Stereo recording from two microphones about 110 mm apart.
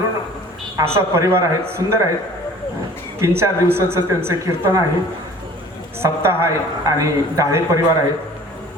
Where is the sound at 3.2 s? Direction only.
25° right (ahead or behind).